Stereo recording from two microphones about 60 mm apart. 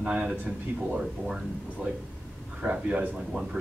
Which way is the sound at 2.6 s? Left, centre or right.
Right.